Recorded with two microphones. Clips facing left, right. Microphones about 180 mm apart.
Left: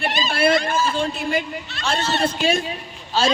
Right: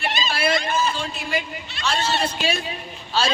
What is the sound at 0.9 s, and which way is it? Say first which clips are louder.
A man's voice: left 5 dB; 50° left (ahead or behind).